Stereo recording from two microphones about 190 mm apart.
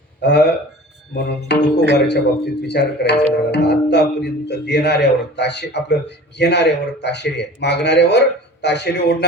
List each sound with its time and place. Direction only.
0.2 s speech: 60° left (ahead or behind)